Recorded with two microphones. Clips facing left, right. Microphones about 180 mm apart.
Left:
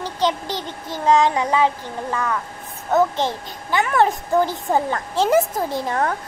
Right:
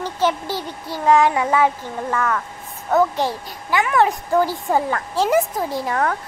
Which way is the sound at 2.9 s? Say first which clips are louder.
Even; 20° left (ahead or behind).